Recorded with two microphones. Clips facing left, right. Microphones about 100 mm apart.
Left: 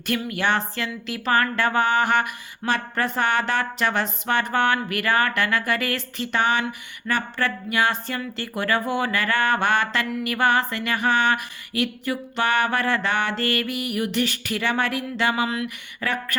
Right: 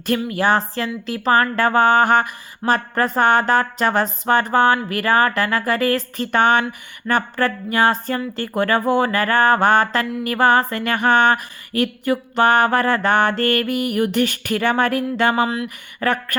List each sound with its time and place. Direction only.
0.0 s speech: 35° right (ahead or behind)
8.4 s mantra: 45° right (ahead or behind)